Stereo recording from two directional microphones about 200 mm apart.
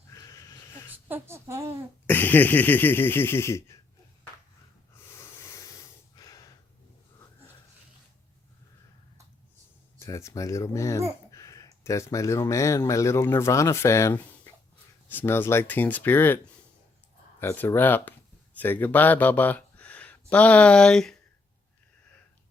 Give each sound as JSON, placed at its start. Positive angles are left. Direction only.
{"t": 0.1, "sound": "sheep", "side_deg": 15}
{"t": 1.0, "sound": "a sound", "side_deg": -10}
{"t": 2.0, "sound": "speech", "side_deg": 10}
{"t": 5.1, "sound": "breathing", "side_deg": 15}
{"t": 10.0, "sound": "speech", "side_deg": 15}
{"t": 17.4, "sound": "speech", "side_deg": 10}